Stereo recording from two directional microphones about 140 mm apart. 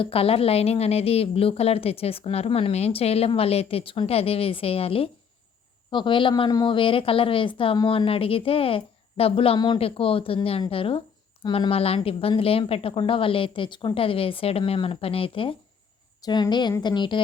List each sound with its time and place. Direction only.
0.0 s a woman's voice: 45° left (ahead or behind)